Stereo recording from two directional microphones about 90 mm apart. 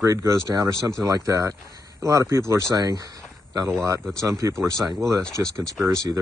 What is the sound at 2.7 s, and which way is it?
Speech, 45° right (ahead or behind).